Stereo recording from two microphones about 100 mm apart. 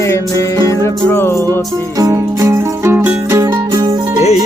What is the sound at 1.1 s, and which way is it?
Music, 25° left (ahead or behind).